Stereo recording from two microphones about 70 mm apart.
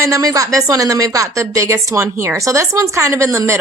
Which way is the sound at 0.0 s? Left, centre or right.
Right.